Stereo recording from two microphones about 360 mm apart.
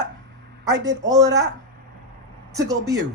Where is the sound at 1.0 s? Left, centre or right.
Centre.